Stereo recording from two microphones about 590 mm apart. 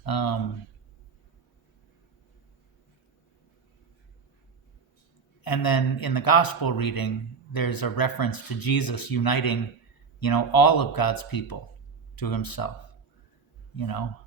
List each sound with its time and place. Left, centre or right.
0.0 s speech: left
5.4 s speech: left
13.7 s speech: left